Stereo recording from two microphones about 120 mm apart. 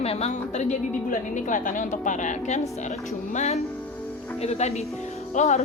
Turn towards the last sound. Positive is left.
turn(degrees=70)  # may be behind; listen again after turning